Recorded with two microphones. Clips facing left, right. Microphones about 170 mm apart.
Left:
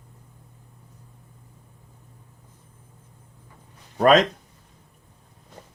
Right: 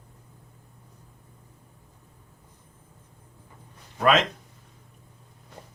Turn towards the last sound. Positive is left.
turn(degrees=40)  # may be behind; listen again after turning